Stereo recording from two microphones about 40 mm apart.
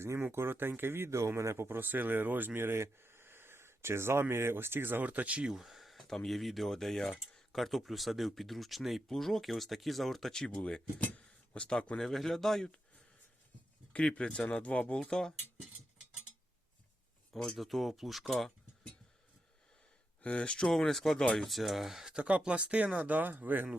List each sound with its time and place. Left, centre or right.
0.2 s speech: right
2.6 s speech: right
5.0 s speech: right
5.5 s a sound: centre
6.1 s speech: centre
11.5 s speech: left
11.9 s speech: centre
13.9 s speech: left
17.5 s speech: centre
20.2 s speech: left
20.7 s speech: centre
22.1 s speech: right
23.1 s speech: right